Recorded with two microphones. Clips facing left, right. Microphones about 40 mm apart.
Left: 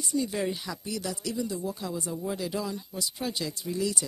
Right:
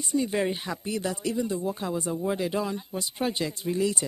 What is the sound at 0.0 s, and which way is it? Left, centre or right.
Speech, right.